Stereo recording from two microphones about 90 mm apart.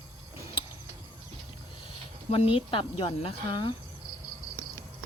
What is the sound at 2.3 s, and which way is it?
Speech, 90° left.